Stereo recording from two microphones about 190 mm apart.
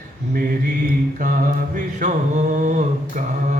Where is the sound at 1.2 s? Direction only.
45° right (ahead or behind).